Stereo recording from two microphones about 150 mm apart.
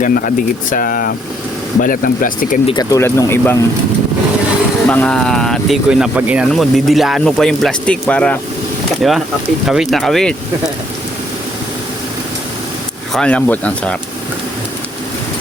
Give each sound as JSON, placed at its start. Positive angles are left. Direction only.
{"t": 0.0, "sound": "speech", "side_deg": 65}
{"t": 2.6, "sound": "speech", "side_deg": 30}
{"t": 3.0, "sound": "speech", "side_deg": 15}
{"t": 4.9, "sound": "speech", "side_deg": 5}
{"t": 9.0, "sound": "speech", "side_deg": 0}
{"t": 13.1, "sound": "speech", "side_deg": 10}